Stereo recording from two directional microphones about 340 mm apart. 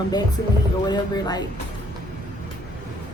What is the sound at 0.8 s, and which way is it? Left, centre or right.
Speech, centre.